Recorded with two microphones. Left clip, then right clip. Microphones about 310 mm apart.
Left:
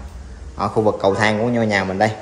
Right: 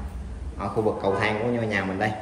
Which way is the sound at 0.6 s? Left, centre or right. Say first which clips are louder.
Left 8 dB; left.